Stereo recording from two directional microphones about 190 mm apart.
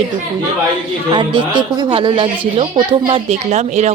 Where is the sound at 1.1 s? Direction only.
25° right (ahead or behind).